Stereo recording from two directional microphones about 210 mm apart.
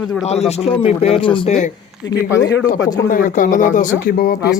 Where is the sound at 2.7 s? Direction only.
40° left (ahead or behind).